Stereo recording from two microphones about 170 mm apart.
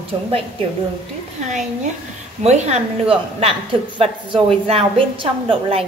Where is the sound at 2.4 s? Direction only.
40° right (ahead or behind).